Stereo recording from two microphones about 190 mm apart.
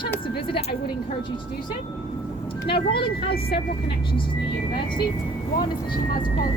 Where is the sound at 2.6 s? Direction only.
25° left (ahead or behind).